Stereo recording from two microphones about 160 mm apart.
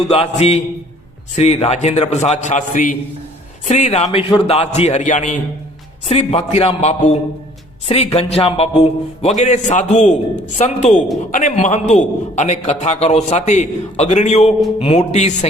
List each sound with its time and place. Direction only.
0.1 s a man's voice: 40° left (ahead or behind)
7.9 s a man's voice: 35° left (ahead or behind)